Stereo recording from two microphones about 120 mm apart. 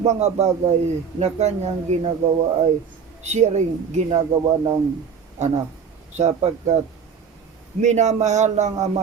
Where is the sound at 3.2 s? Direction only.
70° right (ahead or behind).